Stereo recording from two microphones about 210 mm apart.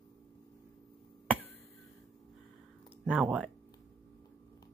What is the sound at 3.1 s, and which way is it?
Speech, 5° right (ahead or behind).